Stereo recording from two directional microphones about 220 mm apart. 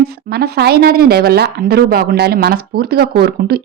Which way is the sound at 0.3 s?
45° right (ahead or behind).